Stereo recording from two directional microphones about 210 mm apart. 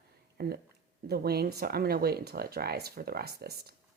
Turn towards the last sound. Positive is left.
turn(degrees=-50)  # may be behind; listen again after turning